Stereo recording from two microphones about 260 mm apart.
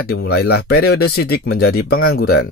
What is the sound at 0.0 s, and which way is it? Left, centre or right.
Speech, left.